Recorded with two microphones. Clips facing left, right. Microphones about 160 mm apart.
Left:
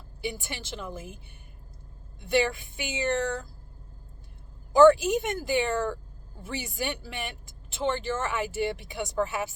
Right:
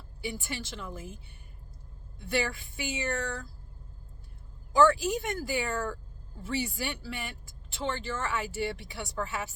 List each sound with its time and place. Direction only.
0.3 s speech: 25° left (ahead or behind)
2.3 s speech: 20° left (ahead or behind)
4.8 s speech: 20° left (ahead or behind)